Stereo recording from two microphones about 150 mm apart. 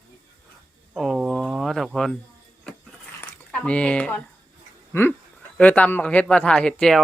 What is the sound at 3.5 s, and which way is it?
Speech, 5° left (ahead or behind).